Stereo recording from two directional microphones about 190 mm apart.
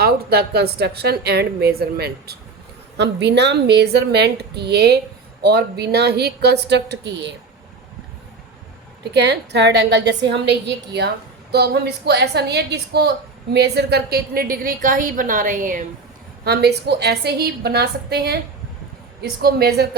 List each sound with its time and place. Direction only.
0.0 s a woman's voice: 55° right (ahead or behind)
9.1 s a woman's voice: 65° right (ahead or behind); by 15.9 s 45° right (ahead or behind)
16.4 s a woman's voice: 60° right (ahead or behind)
19.4 s a woman's voice: 55° right (ahead or behind)